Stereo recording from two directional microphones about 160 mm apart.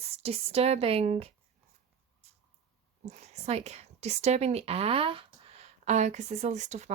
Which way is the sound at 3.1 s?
45° right (ahead or behind).